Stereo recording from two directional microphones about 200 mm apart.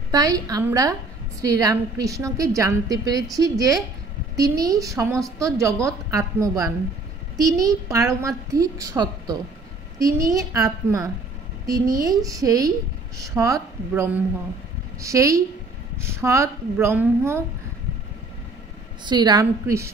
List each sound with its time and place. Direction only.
0.1 s a woman's voice: 20° right (ahead or behind)
19.0 s a woman's voice: 20° right (ahead or behind)